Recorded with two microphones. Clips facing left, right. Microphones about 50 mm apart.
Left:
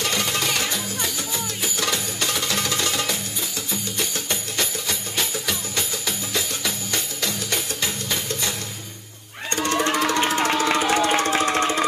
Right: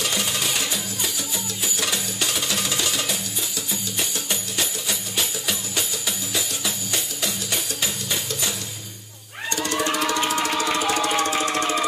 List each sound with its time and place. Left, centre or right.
0.0 s music: left
2.2 s music: left
4.6 s music: left
10.9 s engine: left